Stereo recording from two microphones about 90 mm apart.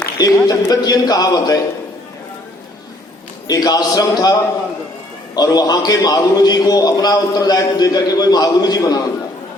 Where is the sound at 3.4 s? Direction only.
45° left (ahead or behind).